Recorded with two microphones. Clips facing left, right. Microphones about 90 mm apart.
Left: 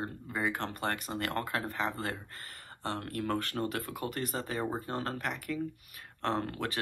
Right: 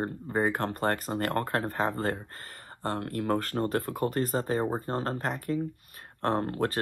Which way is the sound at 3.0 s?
35° right (ahead or behind).